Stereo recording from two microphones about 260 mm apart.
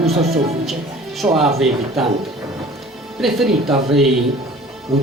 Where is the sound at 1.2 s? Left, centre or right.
Centre.